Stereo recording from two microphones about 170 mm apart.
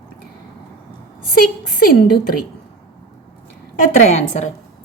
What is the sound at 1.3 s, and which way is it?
Speech, 60° left (ahead or behind).